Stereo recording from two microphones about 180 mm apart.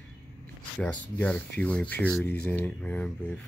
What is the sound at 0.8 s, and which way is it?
Speech, 10° left (ahead or behind).